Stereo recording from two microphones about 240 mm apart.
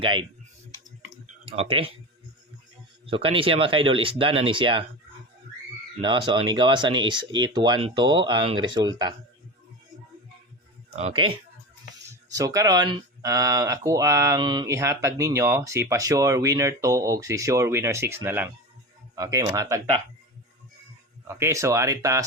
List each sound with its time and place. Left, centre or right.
0.0 s speech: right
1.5 s speech: right
3.1 s speech: right
6.0 s speech: centre
10.9 s speech: right
12.3 s speech: centre
21.2 s speech: centre